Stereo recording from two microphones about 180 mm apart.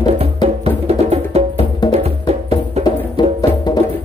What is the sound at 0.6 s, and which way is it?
Music, 35° right (ahead or behind).